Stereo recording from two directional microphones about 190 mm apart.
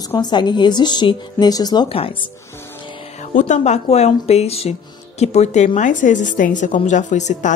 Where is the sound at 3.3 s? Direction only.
40° left (ahead or behind).